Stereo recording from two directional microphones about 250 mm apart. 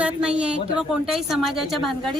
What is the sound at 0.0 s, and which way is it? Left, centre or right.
Speech, centre.